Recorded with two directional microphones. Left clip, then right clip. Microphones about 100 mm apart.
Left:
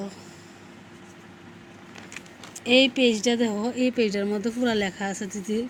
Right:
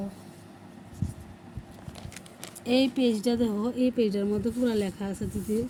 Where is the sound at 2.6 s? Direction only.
25° right (ahead or behind).